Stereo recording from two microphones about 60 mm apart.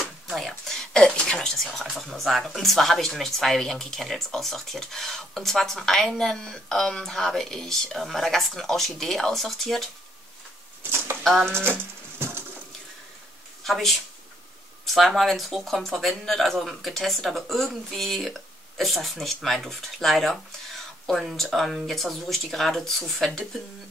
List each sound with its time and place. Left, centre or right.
0.0 s speech: centre
10.8 s a sound: right
13.7 s speech: centre